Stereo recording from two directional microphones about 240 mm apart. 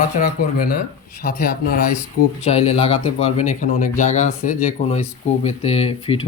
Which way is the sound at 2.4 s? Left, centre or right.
Left.